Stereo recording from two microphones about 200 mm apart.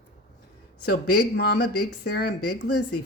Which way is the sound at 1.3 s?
55° left (ahead or behind).